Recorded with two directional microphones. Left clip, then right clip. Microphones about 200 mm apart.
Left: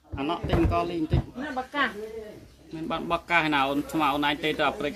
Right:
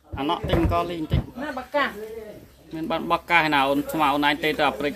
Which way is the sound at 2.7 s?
45° right (ahead or behind).